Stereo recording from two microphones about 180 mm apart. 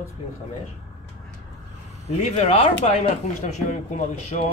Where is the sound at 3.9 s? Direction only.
40° left (ahead or behind).